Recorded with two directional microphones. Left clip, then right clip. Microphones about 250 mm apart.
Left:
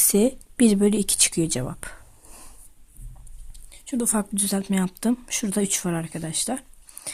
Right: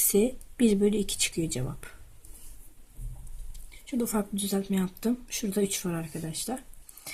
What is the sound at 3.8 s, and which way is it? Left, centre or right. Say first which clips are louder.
Speech: left 4 dB; left.